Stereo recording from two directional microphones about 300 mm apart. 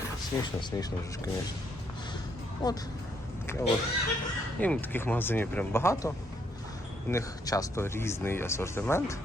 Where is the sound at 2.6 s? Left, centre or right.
Centre.